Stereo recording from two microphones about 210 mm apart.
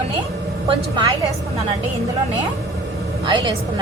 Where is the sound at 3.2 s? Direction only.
20° right (ahead or behind).